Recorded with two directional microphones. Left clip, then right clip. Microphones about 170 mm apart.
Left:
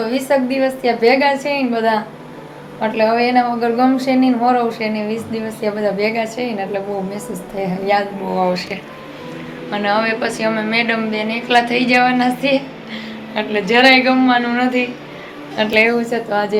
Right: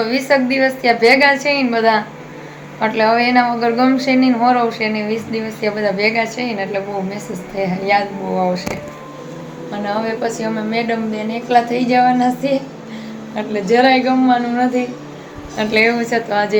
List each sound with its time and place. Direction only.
0.0 s speech: centre (ahead or behind)
3.0 s speech: centre (ahead or behind)
9.7 s a woman's voice: 5° right (ahead or behind)